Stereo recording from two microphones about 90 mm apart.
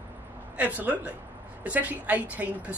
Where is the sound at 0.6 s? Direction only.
15° right (ahead or behind).